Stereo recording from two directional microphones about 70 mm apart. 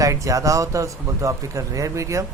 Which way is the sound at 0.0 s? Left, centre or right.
Right.